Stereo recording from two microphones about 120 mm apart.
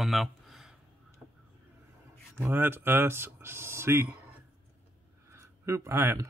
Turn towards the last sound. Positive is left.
turn(degrees=-20)  # may be behind; listen again after turning